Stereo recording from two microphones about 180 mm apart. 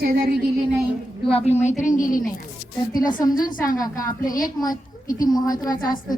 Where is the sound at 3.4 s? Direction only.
50° left (ahead or behind).